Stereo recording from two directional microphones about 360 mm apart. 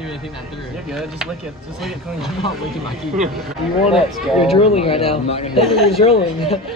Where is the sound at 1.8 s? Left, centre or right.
Centre.